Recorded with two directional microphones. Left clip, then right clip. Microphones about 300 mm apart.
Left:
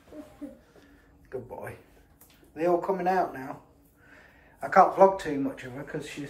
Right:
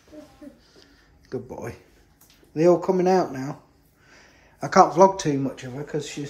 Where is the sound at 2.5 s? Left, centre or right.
Right.